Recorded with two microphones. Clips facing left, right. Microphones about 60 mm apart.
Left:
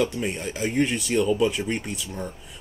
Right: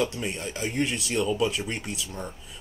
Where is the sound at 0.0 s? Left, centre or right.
Centre.